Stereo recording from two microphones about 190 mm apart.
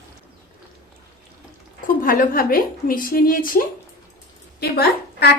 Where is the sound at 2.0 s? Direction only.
45° left (ahead or behind).